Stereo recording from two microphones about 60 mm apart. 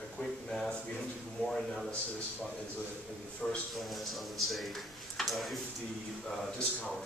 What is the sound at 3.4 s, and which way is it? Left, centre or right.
Speech, centre.